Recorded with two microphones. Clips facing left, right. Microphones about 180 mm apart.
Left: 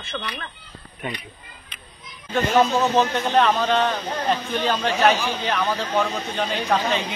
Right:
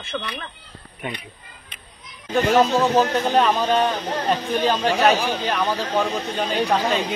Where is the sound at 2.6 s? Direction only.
30° right (ahead or behind).